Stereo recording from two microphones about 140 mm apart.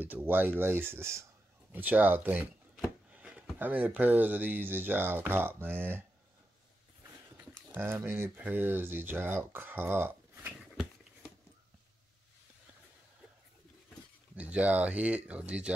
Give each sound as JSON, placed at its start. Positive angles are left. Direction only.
{"t": 0.0, "sound": "speech", "side_deg": -15}
{"t": 3.2, "sound": "a sound", "side_deg": -10}
{"t": 3.5, "sound": "speech", "side_deg": -10}
{"t": 7.7, "sound": "speech", "side_deg": -15}
{"t": 14.3, "sound": "speech", "side_deg": -10}